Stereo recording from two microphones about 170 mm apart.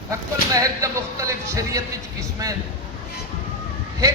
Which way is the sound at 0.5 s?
20° right (ahead or behind).